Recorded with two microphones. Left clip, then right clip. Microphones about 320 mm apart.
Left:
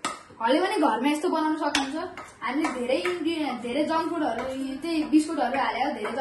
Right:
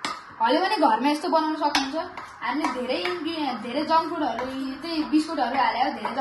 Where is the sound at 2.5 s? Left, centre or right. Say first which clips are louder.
Left 2 dB; centre.